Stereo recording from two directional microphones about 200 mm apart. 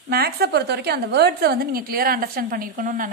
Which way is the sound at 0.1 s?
50° right (ahead or behind).